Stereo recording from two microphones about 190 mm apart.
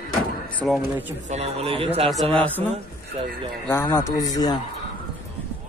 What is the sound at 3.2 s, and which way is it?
Speech, 30° right (ahead or behind).